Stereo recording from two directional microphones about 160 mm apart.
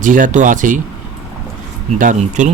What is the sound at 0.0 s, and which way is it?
Speech, 55° right (ahead or behind).